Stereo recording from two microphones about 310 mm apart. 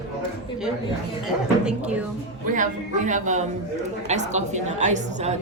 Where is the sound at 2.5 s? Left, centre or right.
Right.